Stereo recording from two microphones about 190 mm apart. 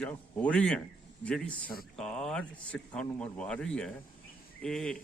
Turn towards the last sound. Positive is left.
turn(degrees=5)  # may be behind; listen again after turning